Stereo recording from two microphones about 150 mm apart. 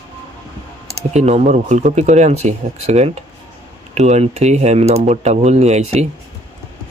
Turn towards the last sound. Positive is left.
turn(degrees=-50)  # may be behind; listen again after turning